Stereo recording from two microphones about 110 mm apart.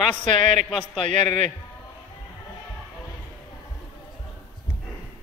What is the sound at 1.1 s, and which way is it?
Speech, 90° right.